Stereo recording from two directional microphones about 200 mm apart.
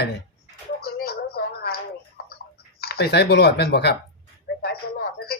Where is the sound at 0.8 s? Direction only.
50° left (ahead or behind).